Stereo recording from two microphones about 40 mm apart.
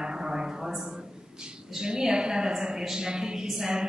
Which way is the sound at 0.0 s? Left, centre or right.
Centre.